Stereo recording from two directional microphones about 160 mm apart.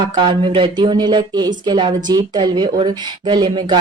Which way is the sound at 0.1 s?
30° right (ahead or behind).